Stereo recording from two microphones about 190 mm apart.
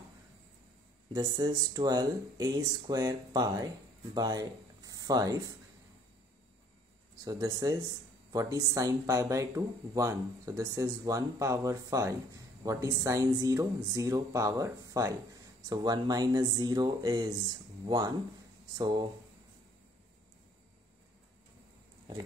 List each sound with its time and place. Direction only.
1.1 s speech: 20° right (ahead or behind)
7.2 s speech: 20° right (ahead or behind)